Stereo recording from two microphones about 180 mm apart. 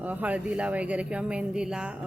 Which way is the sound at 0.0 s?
10° right (ahead or behind).